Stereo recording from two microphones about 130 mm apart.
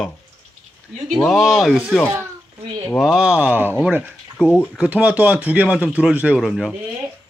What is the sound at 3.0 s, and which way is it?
Speech, 5° right (ahead or behind).